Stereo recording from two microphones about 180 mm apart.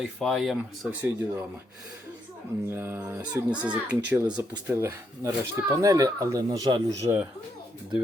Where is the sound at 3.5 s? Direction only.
25° right (ahead or behind).